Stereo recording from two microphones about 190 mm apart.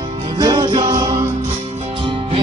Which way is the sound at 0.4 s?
20° right (ahead or behind).